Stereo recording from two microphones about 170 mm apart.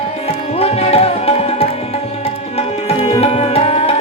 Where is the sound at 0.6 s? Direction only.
35° left (ahead or behind).